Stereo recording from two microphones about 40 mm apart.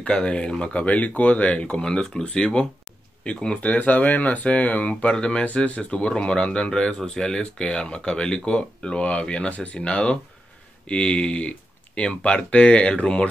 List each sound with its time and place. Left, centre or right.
0.0 s speech: left
3.6 s speech: left
5.1 s speech: left